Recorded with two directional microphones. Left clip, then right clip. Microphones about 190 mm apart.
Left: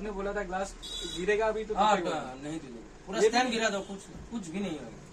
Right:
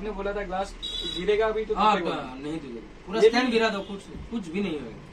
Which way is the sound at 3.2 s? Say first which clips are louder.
Right 6 dB; 15° left (ahead or behind).